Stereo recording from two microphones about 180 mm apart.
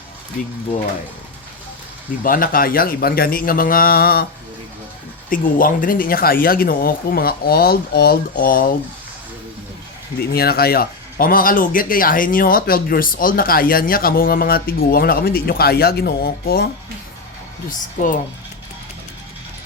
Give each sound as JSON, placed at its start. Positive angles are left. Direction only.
{"t": 2.2, "sound": "a man's voice", "side_deg": 50}
{"t": 5.3, "sound": "speech", "side_deg": 50}
{"t": 10.3, "sound": "speech", "side_deg": 60}
{"t": 17.7, "sound": "a man's voice", "side_deg": 50}